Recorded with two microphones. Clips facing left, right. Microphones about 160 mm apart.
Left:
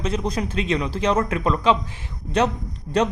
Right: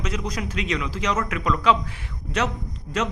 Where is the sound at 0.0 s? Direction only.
30° left (ahead or behind).